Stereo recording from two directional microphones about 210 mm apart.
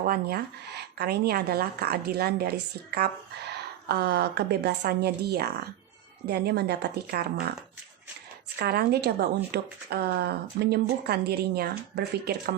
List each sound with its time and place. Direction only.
0.0 s speech: 45° right (ahead or behind)
8.5 s speech: 50° right (ahead or behind)